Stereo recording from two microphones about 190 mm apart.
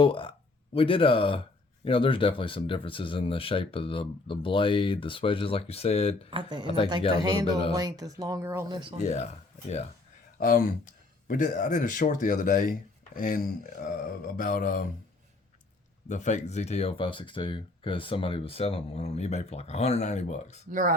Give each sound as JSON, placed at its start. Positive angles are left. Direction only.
{"t": 0.0, "sound": "speech", "side_deg": 25}
{"t": 6.3, "sound": "speech", "side_deg": -25}
{"t": 9.0, "sound": "speech", "side_deg": 35}
{"t": 10.3, "sound": "speech", "side_deg": 50}
{"t": 16.0, "sound": "speech", "side_deg": 40}
{"t": 20.7, "sound": "speech", "side_deg": -45}